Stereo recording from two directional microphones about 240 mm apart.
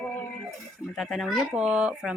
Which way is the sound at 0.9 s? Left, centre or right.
Centre.